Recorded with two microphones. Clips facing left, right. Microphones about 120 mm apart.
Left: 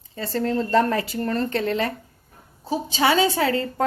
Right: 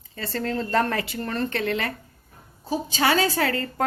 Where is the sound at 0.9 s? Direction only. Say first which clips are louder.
Left 3 dB; 35° left (ahead or behind).